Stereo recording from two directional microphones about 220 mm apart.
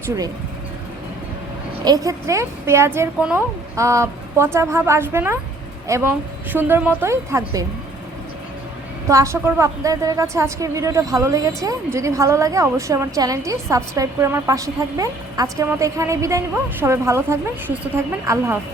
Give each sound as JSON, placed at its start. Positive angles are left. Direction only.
{"t": 1.8, "sound": "a woman's voice", "side_deg": -15}
{"t": 9.0, "sound": "a woman's voice", "side_deg": -15}